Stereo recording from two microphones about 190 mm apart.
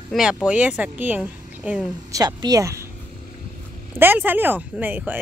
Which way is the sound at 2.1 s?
20° right (ahead or behind).